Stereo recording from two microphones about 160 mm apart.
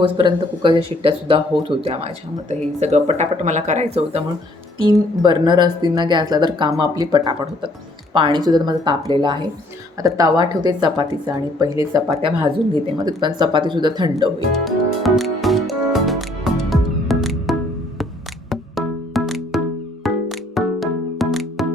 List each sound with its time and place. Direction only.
0.0 s speech: 30° right (ahead or behind)
4.8 s a woman's voice: 25° right (ahead or behind)
14.5 s music: centre (ahead or behind)